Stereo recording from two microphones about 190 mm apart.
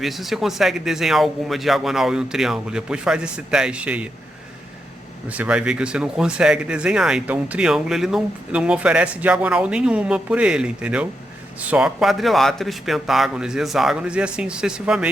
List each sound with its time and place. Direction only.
0.0 s speech: centre (ahead or behind)
5.3 s speech: 5° right (ahead or behind)